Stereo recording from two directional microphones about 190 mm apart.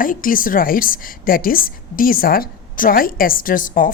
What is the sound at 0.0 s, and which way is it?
Speech, 45° left (ahead or behind).